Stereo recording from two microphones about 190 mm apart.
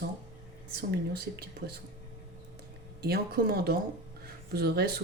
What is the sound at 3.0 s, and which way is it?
Speech, 55° right (ahead or behind).